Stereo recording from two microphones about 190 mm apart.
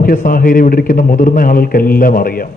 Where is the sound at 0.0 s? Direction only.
50° left (ahead or behind).